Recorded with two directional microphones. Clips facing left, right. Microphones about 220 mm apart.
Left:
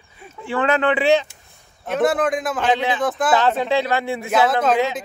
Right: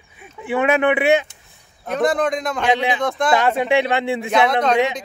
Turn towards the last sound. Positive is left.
turn(degrees=5)  # may be behind; listen again after turning